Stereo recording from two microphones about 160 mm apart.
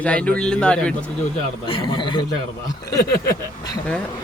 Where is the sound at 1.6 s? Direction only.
35° left (ahead or behind).